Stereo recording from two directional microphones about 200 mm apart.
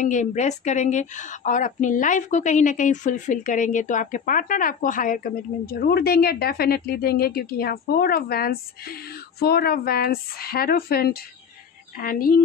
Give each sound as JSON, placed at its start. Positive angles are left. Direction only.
{"t": 0.0, "sound": "a woman's voice", "side_deg": 35}